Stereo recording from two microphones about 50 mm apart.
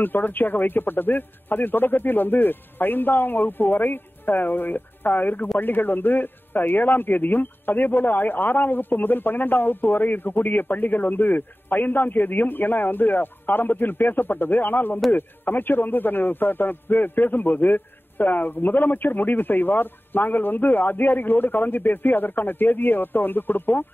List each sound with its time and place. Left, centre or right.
0.0 s a man's voice: left